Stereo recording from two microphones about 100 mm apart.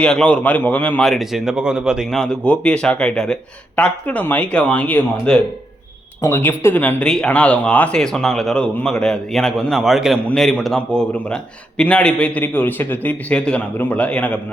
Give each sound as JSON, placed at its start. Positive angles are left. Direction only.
{"t": 0.0, "sound": "speech", "side_deg": 10}
{"t": 2.0, "sound": "a man's voice", "side_deg": 5}